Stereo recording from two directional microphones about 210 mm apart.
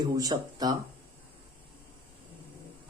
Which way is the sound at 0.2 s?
20° right (ahead or behind).